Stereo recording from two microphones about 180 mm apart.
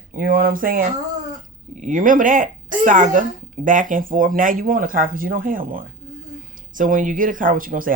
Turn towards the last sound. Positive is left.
turn(degrees=-50)  # may be behind; listen again after turning